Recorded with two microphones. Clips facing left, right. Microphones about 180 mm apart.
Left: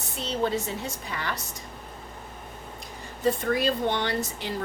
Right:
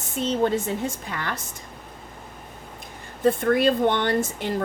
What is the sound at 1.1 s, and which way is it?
Speech, 55° right (ahead or behind).